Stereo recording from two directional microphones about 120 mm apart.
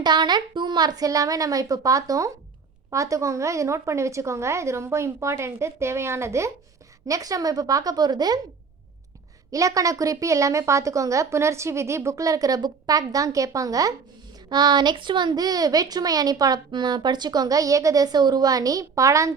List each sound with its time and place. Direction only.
0.0 s a woman's voice: 35° right (ahead or behind)
9.5 s a woman's voice: 30° right (ahead or behind)